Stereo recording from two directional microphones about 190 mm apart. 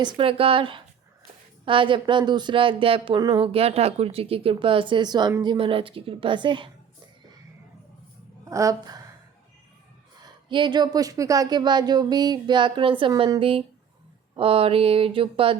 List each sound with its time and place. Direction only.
0.0 s speech: 25° right (ahead or behind)
8.4 s a woman's voice: 15° right (ahead or behind)
10.2 s speech: 25° right (ahead or behind)